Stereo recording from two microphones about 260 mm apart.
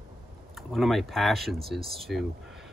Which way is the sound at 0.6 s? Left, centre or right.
Centre.